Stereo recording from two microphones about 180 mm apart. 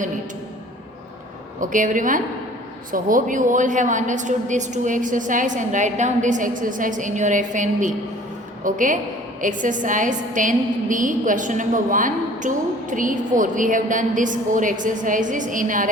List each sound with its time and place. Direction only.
1.7 s a woman's voice: 45° right (ahead or behind)